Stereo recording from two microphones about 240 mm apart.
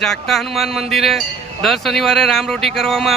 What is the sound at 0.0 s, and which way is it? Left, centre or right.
Speech, centre.